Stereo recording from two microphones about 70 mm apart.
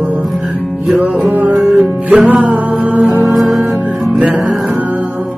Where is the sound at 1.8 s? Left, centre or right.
Right.